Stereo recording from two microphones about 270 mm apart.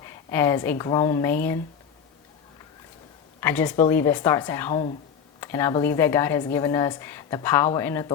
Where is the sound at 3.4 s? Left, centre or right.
Centre.